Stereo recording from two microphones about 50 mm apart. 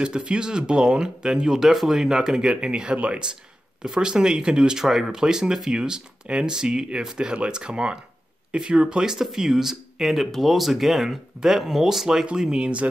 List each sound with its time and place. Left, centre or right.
0.0 s speech: centre
12.4 s speech: centre